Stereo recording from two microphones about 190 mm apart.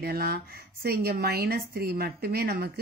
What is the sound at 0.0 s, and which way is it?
Speech, 55° right (ahead or behind).